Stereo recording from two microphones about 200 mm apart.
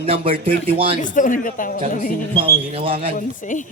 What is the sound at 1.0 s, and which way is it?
A woman's voice, 40° left (ahead or behind).